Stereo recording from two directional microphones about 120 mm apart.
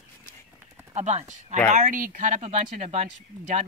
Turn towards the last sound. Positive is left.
turn(degrees=-70)  # may be behind; listen again after turning